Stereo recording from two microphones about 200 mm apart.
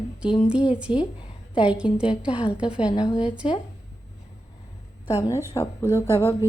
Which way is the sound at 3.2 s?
5° right (ahead or behind).